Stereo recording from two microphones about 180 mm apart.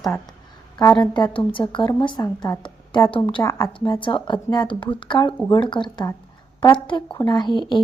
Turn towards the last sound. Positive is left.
turn(degrees=25)  # may be behind; listen again after turning